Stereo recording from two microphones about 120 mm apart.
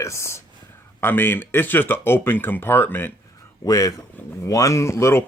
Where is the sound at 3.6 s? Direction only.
30° left (ahead or behind).